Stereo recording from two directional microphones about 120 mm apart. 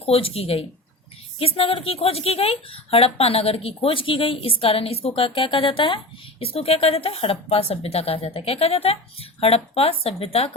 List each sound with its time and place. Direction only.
0.0 s speech: 55° left (ahead or behind)